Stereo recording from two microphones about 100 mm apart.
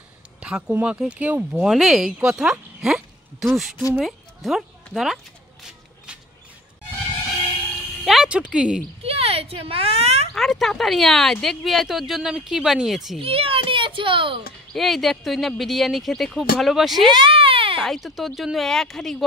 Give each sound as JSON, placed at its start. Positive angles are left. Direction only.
{"t": 0.4, "sound": "speech", "side_deg": -10}
{"t": 4.0, "sound": "music", "side_deg": 0}
{"t": 8.0, "sound": "a sound", "side_deg": 0}
{"t": 8.3, "sound": "speech", "side_deg": -10}
{"t": 9.0, "sound": "a sound", "side_deg": -80}
{"t": 10.3, "sound": "speech", "side_deg": 0}
{"t": 13.2, "sound": "a child's voice", "side_deg": -70}
{"t": 14.7, "sound": "speech", "side_deg": 0}
{"t": 17.1, "sound": "baby cry", "side_deg": -60}
{"t": 17.7, "sound": "speech", "side_deg": 0}